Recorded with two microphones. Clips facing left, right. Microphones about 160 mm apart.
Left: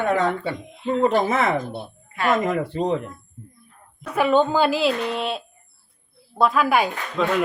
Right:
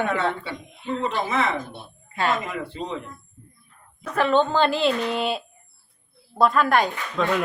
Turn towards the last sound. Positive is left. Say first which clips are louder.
# left 1 dB
turn(degrees=5)  # may be behind; listen again after turning